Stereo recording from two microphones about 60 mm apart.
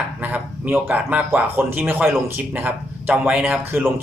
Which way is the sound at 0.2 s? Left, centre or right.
Right.